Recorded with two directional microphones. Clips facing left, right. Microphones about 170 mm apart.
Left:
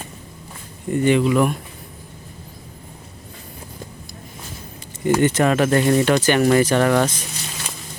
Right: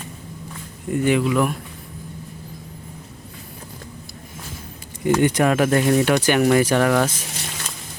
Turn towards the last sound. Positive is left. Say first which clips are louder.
# left 1 dB
turn(degrees=-5)  # may be behind; listen again after turning